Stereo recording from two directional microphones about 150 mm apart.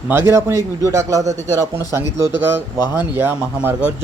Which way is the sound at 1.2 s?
50° right (ahead or behind).